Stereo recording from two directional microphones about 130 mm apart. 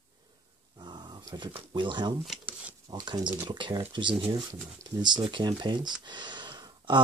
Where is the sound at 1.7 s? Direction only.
35° right (ahead or behind).